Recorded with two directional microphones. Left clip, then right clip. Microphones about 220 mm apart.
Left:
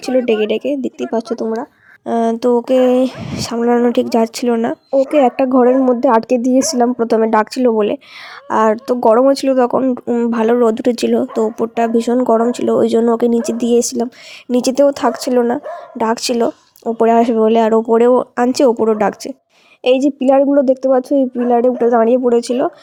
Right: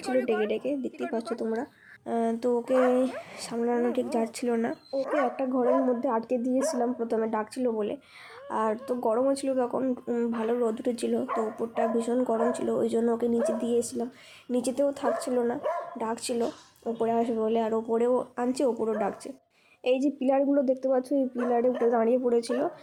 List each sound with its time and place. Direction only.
0.3 s speech: 40° left (ahead or behind)